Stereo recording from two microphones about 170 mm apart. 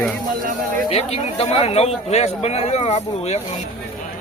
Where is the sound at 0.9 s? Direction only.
35° left (ahead or behind).